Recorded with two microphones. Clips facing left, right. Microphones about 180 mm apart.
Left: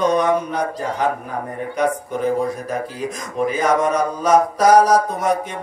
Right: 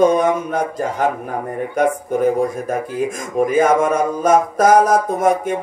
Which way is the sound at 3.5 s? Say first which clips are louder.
Right 3 dB; 50° right (ahead or behind).